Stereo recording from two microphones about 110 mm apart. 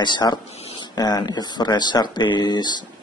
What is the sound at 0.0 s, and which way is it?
Speech, 40° left (ahead or behind).